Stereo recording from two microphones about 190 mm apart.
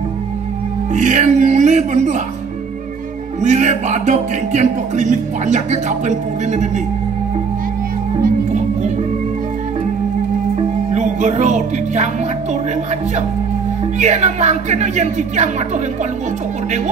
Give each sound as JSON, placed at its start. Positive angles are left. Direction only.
{"t": 0.9, "sound": "music", "side_deg": -40}
{"t": 3.3, "sound": "music", "side_deg": -40}
{"t": 10.5, "sound": "music", "side_deg": -40}
{"t": 13.9, "sound": "music", "side_deg": -35}